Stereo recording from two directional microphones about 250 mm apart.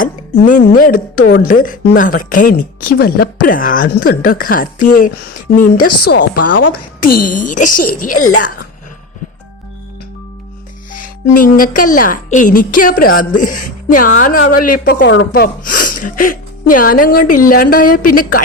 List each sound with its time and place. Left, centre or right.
0.0 s a woman's voice: left
6.1 s speech: left
6.5 s a woman's voice: left
7.2 s a woman's voice: left
7.7 s speech: left
8.2 s a woman's voice: left
10.9 s a woman's voice: left
15.3 s a woman's voice: left